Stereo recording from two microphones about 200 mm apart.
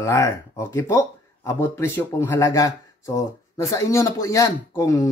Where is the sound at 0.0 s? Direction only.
15° left (ahead or behind).